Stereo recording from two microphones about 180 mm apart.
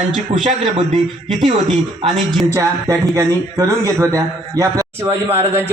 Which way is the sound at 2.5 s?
15° right (ahead or behind).